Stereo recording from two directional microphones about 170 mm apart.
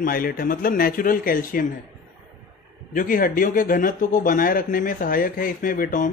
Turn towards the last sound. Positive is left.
turn(degrees=50)  # may be behind; listen again after turning